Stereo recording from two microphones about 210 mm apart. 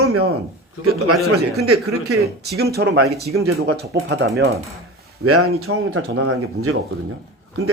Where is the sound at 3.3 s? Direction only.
90° right.